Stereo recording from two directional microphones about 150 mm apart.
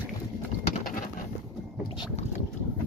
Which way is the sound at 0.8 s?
65° left (ahead or behind).